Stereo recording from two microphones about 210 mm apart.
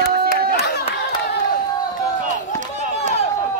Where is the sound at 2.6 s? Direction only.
35° right (ahead or behind).